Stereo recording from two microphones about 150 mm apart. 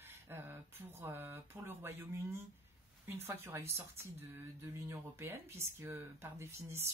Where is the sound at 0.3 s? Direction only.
15° right (ahead or behind).